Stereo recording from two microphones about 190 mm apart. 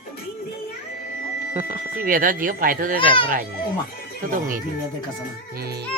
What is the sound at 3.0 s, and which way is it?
Speech, 25° left (ahead or behind).